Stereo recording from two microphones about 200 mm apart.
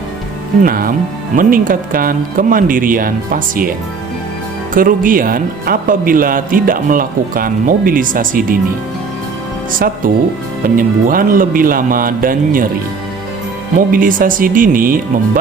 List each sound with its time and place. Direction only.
0.6 s speech: 45° right (ahead or behind)
9.8 s speech: 50° right (ahead or behind)
13.7 s speech: 45° right (ahead or behind)